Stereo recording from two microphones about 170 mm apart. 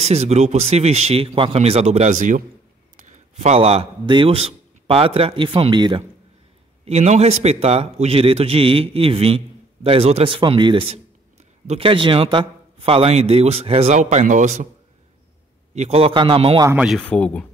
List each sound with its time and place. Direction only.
0.0 s a man's voice: 40° right (ahead or behind)
6.8 s a man's voice: 40° right (ahead or behind)
15.7 s a man's voice: 40° right (ahead or behind)
16.6 s speech: 5° right (ahead or behind)
17.1 s speech: 5° left (ahead or behind)